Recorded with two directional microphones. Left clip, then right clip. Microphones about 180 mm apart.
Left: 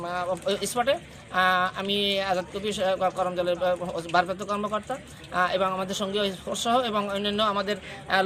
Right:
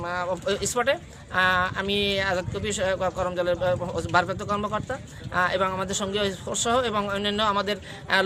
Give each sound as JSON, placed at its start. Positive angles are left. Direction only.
{"t": 0.0, "sound": "speech", "side_deg": -15}
{"t": 7.6, "sound": "a man's voice", "side_deg": -45}